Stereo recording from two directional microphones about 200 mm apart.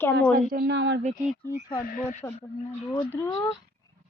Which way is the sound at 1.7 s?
45° left (ahead or behind).